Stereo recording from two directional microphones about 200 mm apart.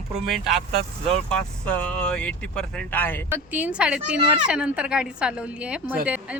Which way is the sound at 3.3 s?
5° right (ahead or behind).